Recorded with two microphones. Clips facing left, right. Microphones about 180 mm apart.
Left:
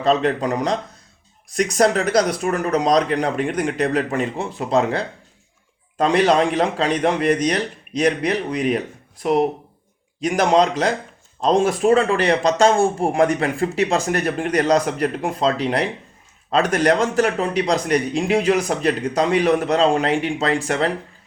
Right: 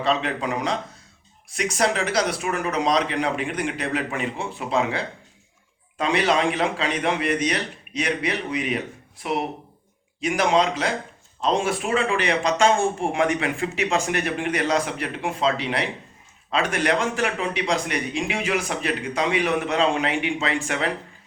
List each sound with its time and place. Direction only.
0.0 s speech: 40° left (ahead or behind)